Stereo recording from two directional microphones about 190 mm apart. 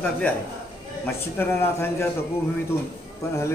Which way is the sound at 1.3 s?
15° left (ahead or behind).